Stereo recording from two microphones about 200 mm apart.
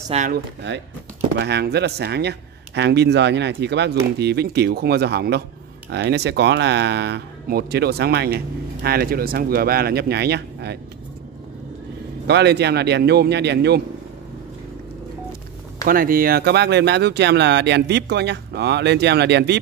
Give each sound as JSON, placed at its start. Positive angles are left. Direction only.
{"t": 0.1, "sound": "speech", "side_deg": -30}
{"t": 0.7, "sound": "speech", "side_deg": -60}
{"t": 12.3, "sound": "speech", "side_deg": -55}
{"t": 15.8, "sound": "speech", "side_deg": -45}